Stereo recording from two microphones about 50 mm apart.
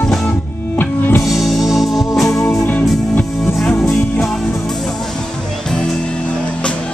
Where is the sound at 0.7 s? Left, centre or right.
Left.